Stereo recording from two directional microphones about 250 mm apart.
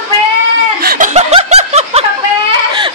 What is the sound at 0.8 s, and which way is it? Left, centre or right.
Snicker, right.